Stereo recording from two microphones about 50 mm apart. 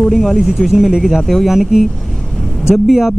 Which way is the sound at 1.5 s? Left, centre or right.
Centre.